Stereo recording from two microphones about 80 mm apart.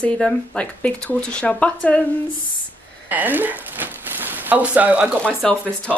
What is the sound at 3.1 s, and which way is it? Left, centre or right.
Speech, right.